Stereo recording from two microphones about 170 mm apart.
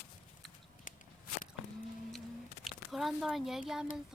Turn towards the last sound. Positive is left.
turn(degrees=0)  # may be behind; listen again after turning